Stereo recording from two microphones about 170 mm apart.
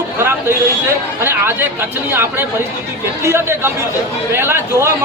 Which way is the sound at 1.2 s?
15° right (ahead or behind).